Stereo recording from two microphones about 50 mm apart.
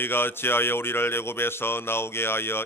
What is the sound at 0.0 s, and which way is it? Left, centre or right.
Speech, left.